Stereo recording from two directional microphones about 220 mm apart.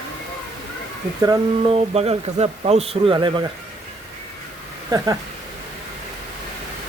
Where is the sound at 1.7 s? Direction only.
30° right (ahead or behind).